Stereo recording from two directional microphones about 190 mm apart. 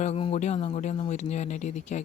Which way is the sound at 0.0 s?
35° left (ahead or behind).